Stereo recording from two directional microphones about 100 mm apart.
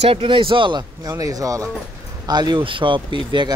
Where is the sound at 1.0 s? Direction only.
35° right (ahead or behind).